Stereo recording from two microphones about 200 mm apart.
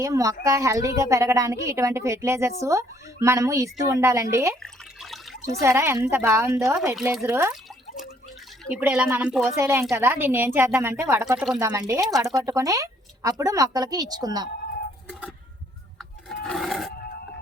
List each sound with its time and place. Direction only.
0.0 s a woman's voice: 15° right (ahead or behind)
4.6 s water: centre (ahead or behind)
5.6 s a woman's voice: 15° right (ahead or behind)
8.7 s a woman's voice: 5° right (ahead or behind)
16.0 s music: centre (ahead or behind)